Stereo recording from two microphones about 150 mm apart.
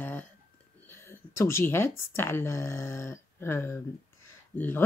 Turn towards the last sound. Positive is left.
turn(degrees=15)  # may be behind; listen again after turning